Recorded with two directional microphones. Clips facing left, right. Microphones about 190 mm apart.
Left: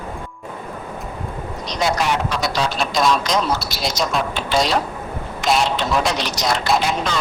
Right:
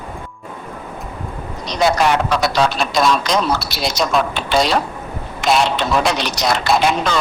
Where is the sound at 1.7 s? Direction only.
65° right (ahead or behind).